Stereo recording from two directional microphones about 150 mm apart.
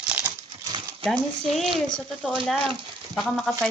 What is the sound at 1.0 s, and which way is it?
Speech, centre (ahead or behind).